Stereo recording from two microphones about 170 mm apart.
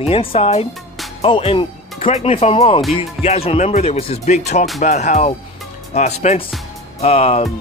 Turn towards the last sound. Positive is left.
turn(degrees=35)  # may be behind; listen again after turning